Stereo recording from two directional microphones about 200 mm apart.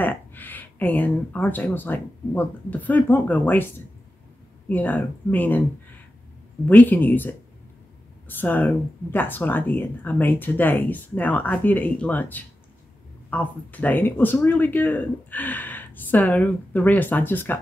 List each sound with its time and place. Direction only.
0.0 s speech: 10° left (ahead or behind)
4.6 s speech: 10° left (ahead or behind)
6.7 s speech: 10° left (ahead or behind)